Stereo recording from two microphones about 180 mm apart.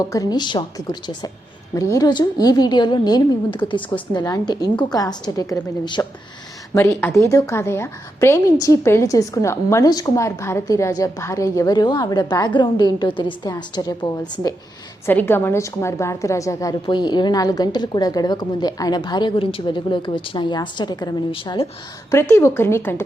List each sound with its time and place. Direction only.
0.0 s a woman's voice: 20° left (ahead or behind)
15.0 s a woman's voice: 10° left (ahead or behind); by 21.7 s 30° left (ahead or behind)
22.1 s speech: 15° left (ahead or behind)